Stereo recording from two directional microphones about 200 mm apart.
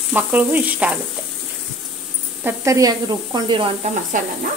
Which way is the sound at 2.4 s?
15° right (ahead or behind).